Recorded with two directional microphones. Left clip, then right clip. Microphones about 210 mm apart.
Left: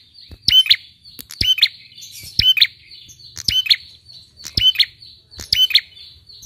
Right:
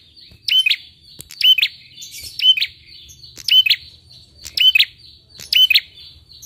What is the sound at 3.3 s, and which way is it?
Chirp, 20° left (ahead or behind).